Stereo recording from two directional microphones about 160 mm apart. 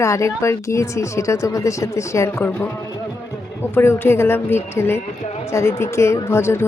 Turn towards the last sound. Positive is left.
turn(degrees=15)  # may be behind; listen again after turning